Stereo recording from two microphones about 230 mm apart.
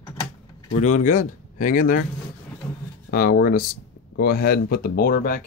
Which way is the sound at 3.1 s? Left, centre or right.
Left.